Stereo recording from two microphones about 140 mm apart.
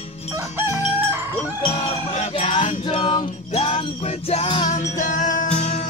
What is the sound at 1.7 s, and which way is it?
Music, 55° left (ahead or behind).